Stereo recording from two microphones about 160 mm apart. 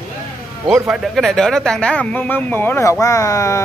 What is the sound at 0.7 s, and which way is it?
Speech, 5° right (ahead or behind).